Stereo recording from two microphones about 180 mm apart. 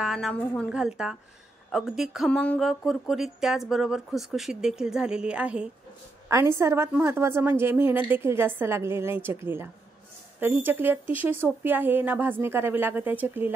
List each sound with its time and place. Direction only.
0.0 s speech: centre (ahead or behind)
0.7 s a woman's voice: 5° right (ahead or behind)